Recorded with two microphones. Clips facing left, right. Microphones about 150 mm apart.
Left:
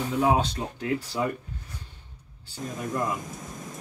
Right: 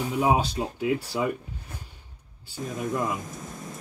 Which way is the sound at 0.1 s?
10° right (ahead or behind).